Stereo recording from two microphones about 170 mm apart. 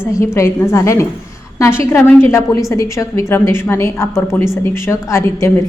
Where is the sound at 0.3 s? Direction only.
15° left (ahead or behind).